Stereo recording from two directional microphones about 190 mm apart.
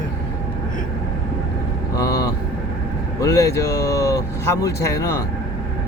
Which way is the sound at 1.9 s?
20° left (ahead or behind).